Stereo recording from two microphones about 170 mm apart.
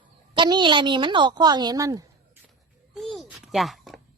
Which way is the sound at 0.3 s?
25° right (ahead or behind).